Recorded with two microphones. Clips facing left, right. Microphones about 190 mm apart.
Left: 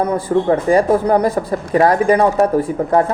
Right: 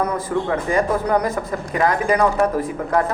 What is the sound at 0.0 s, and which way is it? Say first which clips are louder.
Speech: left 5 dB; 30° left (ahead or behind).